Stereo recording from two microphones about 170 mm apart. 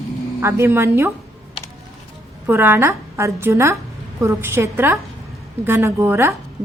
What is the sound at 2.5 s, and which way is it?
A woman's voice, 10° right (ahead or behind).